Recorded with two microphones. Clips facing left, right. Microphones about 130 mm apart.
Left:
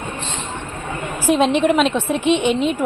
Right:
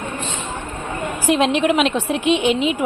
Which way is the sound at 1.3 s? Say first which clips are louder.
Left 1 dB; centre (ahead or behind).